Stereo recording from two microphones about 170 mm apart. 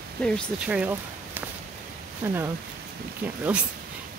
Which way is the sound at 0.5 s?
5° right (ahead or behind).